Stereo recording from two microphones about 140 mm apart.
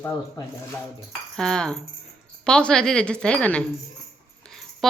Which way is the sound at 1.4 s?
5° left (ahead or behind).